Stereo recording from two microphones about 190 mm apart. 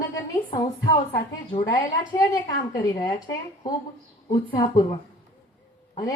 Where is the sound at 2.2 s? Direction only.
20° left (ahead or behind).